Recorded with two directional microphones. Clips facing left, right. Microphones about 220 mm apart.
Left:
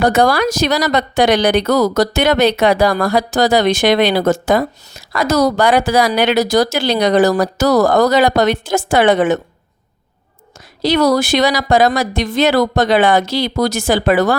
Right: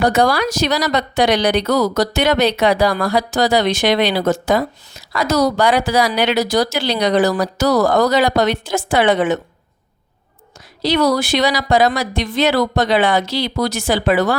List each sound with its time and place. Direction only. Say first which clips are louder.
0.0 s a woman's voice: left 2 dB; 50° left (ahead or behind)
10.8 s a woman's voice: left 3 dB; 45° left (ahead or behind)